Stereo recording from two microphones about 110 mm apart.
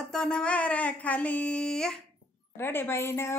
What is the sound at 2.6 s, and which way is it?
Speech, 20° left (ahead or behind).